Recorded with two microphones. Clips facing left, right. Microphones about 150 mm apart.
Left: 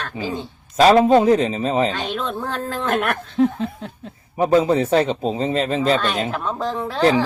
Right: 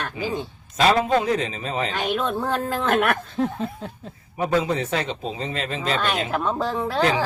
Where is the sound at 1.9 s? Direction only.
10° right (ahead or behind).